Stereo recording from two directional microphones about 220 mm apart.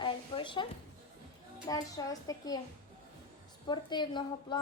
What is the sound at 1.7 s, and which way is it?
Speech, 15° left (ahead or behind).